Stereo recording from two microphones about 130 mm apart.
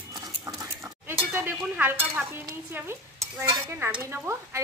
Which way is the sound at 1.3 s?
15° right (ahead or behind).